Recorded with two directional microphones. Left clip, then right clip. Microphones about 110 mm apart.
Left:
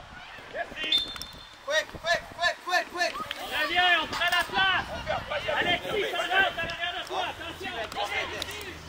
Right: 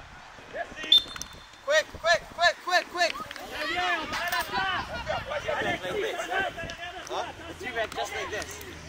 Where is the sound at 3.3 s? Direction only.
20° left (ahead or behind).